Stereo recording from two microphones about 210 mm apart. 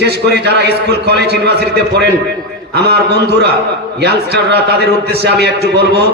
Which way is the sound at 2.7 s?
50° right (ahead or behind).